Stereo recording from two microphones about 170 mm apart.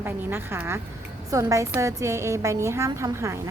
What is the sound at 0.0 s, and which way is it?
A woman's voice, 15° right (ahead or behind).